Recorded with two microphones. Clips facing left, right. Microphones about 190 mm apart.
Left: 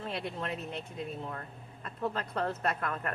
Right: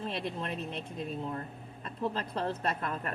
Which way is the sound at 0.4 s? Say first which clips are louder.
Even; 30° right (ahead or behind).